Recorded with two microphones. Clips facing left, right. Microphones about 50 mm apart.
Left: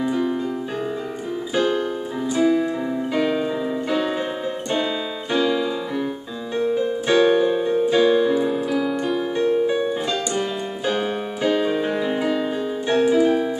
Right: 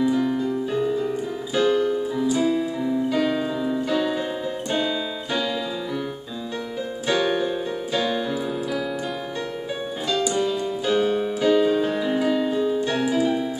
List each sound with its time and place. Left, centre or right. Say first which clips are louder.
0.0 s piano: right 1 dB; centre
2.3 s keyboard: left 6 dB; left
2.9 s music: right 3 dB; centre
5.3 s piano: left 6 dB; centre
7.1 s keyboard: left 5 dB; left
10.9 s keyboard: right 3 dB; centre
11.9 s music: even; centre
13.1 s keyboard: left 4 dB; left